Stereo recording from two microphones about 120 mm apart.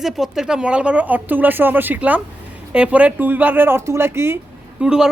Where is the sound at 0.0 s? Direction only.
5° right (ahead or behind); by 4.4 s 20° right (ahead or behind).